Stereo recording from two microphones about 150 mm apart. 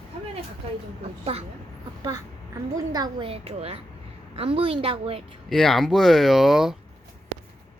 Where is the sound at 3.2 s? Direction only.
40° right (ahead or behind).